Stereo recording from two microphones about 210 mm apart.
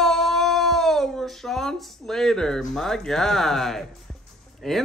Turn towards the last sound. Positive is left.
turn(degrees=0)  # may be behind; listen again after turning